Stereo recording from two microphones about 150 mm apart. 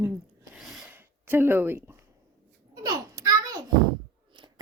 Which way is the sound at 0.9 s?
15° right (ahead or behind).